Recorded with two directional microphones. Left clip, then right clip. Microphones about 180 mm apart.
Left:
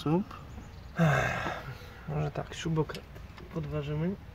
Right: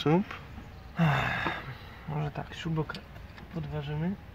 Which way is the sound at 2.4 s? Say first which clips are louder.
Left 2 dB; 45° left (ahead or behind).